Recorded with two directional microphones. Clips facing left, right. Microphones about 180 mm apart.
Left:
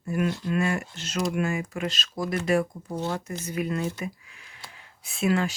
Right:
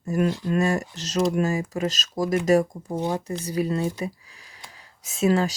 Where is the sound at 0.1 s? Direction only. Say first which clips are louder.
Right 3 dB; 40° right (ahead or behind).